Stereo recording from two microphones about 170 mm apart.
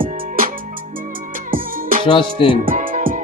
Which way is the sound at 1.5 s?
55° right (ahead or behind).